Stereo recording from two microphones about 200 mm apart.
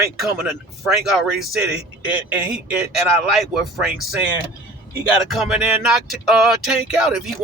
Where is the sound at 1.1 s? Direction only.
Centre (ahead or behind).